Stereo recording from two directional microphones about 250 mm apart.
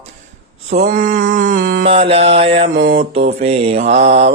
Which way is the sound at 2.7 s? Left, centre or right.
Right.